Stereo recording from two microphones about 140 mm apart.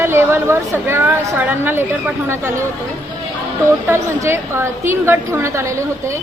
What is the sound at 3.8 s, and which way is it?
A woman's voice, 20° right (ahead or behind).